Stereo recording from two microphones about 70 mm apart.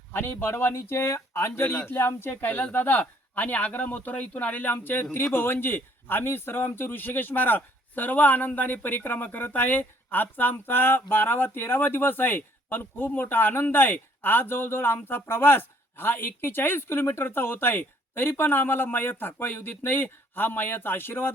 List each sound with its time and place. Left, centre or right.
0.1 s a man's voice: left
1.6 s speech: centre
1.9 s a man's voice: left